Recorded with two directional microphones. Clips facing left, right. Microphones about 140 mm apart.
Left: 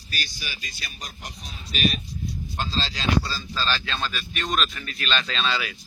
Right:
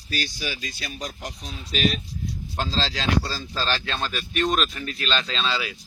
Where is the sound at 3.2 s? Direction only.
60° right (ahead or behind); by 4.7 s 45° right (ahead or behind).